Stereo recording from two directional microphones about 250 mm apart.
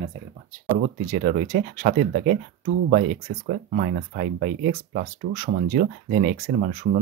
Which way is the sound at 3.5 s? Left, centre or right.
Right.